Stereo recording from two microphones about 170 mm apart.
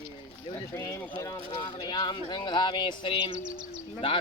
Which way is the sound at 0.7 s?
15° left (ahead or behind).